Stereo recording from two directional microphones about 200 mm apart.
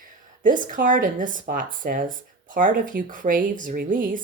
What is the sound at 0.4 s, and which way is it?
Speech, 40° right (ahead or behind).